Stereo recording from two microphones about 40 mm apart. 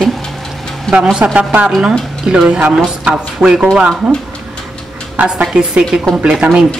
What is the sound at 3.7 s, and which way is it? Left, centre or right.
Speech, right.